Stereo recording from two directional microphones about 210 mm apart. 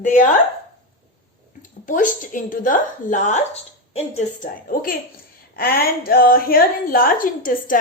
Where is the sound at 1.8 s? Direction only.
40° left (ahead or behind).